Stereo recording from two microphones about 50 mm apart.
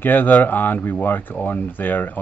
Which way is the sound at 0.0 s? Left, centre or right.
Left.